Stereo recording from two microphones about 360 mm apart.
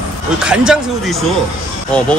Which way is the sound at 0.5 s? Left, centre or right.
Centre.